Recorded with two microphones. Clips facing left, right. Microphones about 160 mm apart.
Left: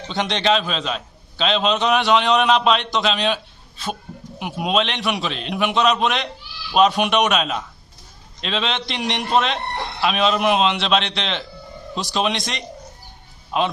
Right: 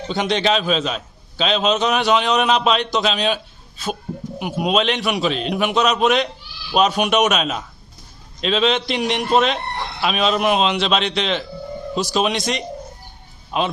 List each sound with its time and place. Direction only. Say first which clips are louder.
0.1 s a man's voice: right 1 dB; 5° right (ahead or behind)